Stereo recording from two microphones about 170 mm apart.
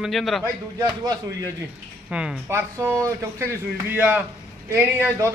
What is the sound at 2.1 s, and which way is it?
Speech, 5° right (ahead or behind).